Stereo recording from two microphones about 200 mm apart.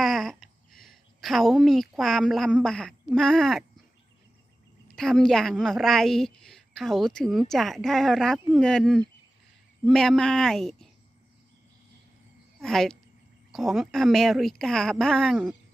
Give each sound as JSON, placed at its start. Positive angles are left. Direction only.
{"t": 0.0, "sound": "a woman's voice", "side_deg": 0}
{"t": 4.9, "sound": "a woman's voice", "side_deg": 0}
{"t": 12.6, "sound": "a woman's voice", "side_deg": 0}